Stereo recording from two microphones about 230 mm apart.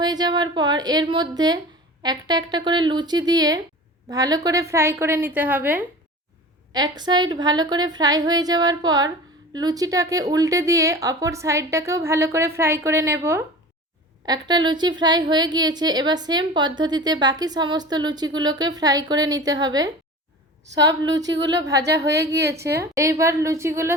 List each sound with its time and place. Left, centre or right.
0.0 s a woman's voice: centre
21.2 s speech: right
21.5 s a woman's voice: centre